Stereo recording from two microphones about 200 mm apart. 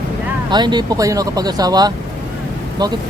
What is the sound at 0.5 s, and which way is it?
Speech, 20° right (ahead or behind).